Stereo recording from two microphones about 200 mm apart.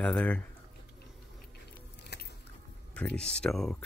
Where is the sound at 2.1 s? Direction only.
55° left (ahead or behind).